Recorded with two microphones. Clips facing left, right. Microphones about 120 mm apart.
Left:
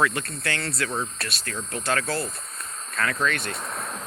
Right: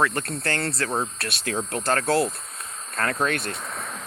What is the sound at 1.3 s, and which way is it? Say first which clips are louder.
Speech: right 6 dB; 85° right.